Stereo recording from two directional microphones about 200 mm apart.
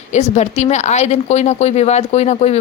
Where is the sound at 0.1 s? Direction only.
35° left (ahead or behind).